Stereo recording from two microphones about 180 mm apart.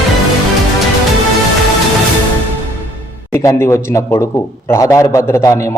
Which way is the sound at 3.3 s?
15° left (ahead or behind).